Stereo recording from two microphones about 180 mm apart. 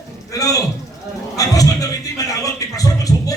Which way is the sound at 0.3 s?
20° left (ahead or behind).